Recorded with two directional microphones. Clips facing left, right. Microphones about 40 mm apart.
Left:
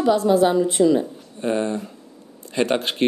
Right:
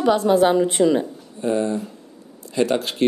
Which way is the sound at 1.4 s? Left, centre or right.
Left.